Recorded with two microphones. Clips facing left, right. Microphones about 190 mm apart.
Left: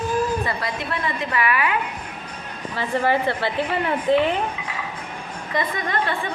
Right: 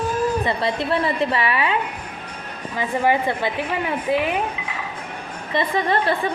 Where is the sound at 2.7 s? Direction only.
15° right (ahead or behind).